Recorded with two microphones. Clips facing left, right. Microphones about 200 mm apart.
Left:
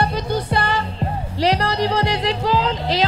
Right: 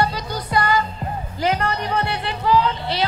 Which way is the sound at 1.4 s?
80° left.